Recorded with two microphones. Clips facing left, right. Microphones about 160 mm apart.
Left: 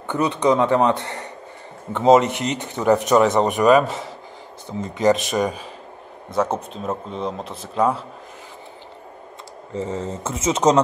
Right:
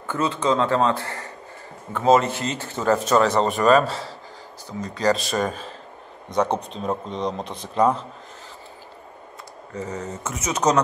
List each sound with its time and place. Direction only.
0.0 s a man's voice: 20° left (ahead or behind)
9.8 s a man's voice: 25° left (ahead or behind)